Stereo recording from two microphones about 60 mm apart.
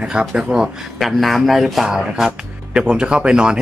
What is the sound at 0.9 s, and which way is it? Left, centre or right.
Speech, centre.